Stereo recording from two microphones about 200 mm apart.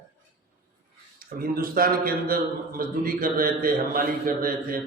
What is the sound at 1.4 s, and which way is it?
A man's voice, 45° right (ahead or behind).